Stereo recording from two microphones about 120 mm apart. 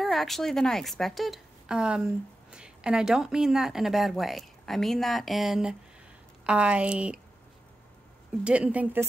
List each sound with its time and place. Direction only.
0.0 s a woman's voice: centre (ahead or behind)
8.5 s speech: 10° right (ahead or behind)